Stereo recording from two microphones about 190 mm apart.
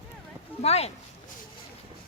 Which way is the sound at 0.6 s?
35° left (ahead or behind).